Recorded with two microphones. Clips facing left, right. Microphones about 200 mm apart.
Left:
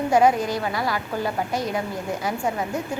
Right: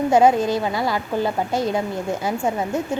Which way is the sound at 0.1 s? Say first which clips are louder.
Right 3 dB; 25° right (ahead or behind).